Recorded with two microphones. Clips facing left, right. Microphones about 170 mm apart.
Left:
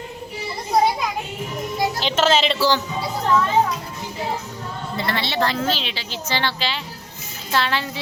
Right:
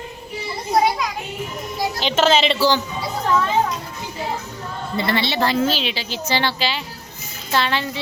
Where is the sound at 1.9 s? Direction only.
Centre (ahead or behind).